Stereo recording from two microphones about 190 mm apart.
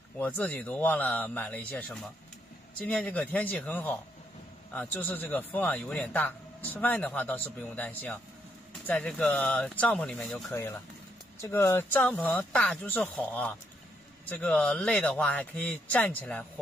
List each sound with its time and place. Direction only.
0.2 s a man's voice: 10° left (ahead or behind)